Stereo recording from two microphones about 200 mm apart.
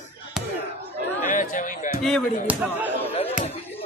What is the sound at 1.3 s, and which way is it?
Chatter, 40° left (ahead or behind).